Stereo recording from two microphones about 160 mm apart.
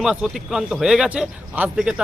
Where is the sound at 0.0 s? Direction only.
5° right (ahead or behind).